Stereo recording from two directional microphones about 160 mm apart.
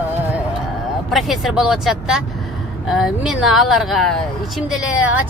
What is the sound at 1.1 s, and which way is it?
Speech, centre (ahead or behind).